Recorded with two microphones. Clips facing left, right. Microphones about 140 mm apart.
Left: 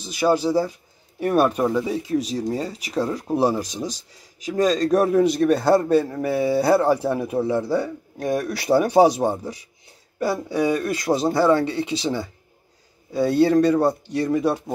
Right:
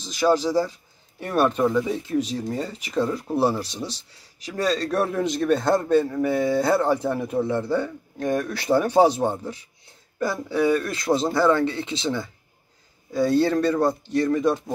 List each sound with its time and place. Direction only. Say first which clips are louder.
0.0 s a man's voice: left 1 dB; 10° left (ahead or behind)
3.6 s speech: left 3 dB; 45° left (ahead or behind)
4.5 s a man's voice: left 5 dB; 15° left (ahead or behind)
13.1 s a man's voice: left 3 dB; 10° left (ahead or behind)